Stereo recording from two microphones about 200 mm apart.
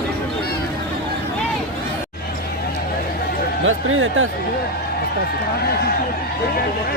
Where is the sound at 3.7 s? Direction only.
90° right.